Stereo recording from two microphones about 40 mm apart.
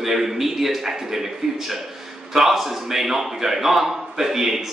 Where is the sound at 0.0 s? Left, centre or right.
Centre.